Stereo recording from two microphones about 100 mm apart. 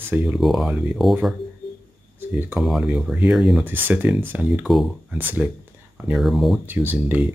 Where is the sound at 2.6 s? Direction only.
5° right (ahead or behind).